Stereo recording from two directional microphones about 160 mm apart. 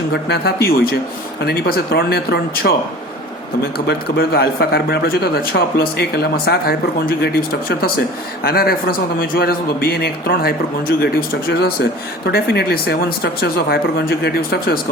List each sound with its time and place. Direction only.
0.1 s speech: 90° left